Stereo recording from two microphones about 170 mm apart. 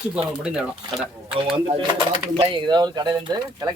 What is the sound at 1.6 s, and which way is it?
Speech, 30° right (ahead or behind).